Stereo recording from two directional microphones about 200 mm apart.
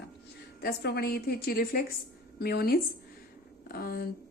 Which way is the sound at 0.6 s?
55° left (ahead or behind).